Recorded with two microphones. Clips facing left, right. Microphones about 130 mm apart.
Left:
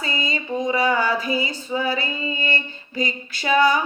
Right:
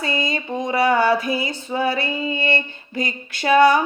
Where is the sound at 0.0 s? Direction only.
60° right (ahead or behind).